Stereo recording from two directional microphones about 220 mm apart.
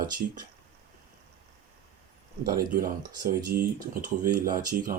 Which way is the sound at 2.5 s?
40° right (ahead or behind).